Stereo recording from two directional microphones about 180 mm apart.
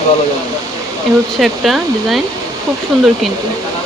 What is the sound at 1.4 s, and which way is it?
Speech, centre (ahead or behind).